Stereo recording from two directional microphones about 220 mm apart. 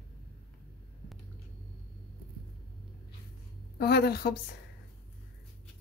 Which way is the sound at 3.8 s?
45° left (ahead or behind).